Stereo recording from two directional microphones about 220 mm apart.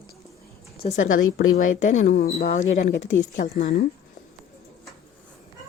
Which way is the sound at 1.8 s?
35° left (ahead or behind).